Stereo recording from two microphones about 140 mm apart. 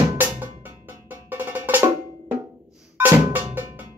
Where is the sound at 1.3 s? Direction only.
15° right (ahead or behind).